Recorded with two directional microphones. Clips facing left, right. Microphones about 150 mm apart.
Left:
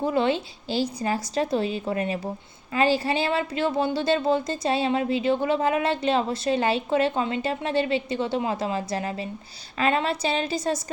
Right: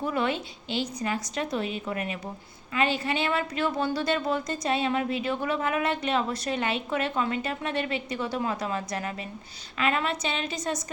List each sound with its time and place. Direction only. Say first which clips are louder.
0.0 s a woman's voice: left 5 dB; 30° left (ahead or behind)